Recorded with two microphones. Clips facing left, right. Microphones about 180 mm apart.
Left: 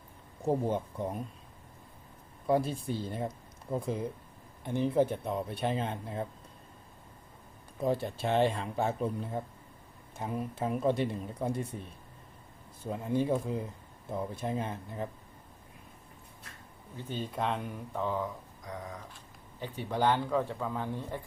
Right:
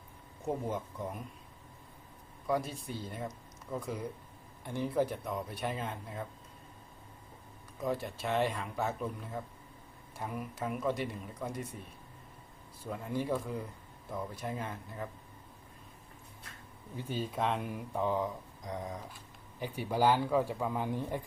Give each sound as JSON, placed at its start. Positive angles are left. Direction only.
{"t": 0.4, "sound": "speech", "side_deg": 30}
{"t": 2.5, "sound": "speech", "side_deg": 30}
{"t": 7.8, "sound": "speech", "side_deg": 30}
{"t": 12.8, "sound": "speech", "side_deg": 20}
{"t": 17.0, "sound": "speech", "side_deg": -5}
{"t": 19.5, "sound": "speech", "side_deg": -10}